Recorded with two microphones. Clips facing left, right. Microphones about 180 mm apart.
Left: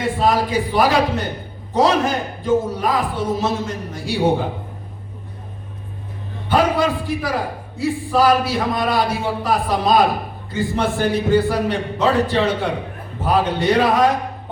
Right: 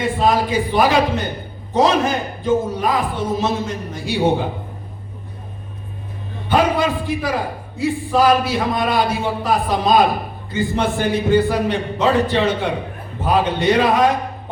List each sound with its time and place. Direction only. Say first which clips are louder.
0.0 s a man's voice: right 1 dB; 20° right (ahead or behind)
6.5 s a man's voice: even; 20° right (ahead or behind)